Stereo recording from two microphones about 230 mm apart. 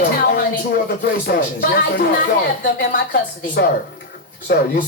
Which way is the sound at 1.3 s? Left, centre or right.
Left.